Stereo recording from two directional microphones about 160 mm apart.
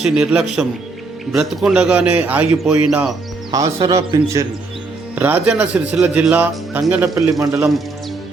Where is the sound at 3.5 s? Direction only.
20° right (ahead or behind).